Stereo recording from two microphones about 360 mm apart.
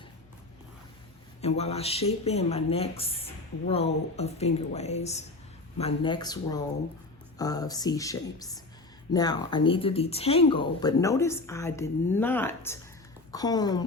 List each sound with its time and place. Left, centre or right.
1.4 s speech: centre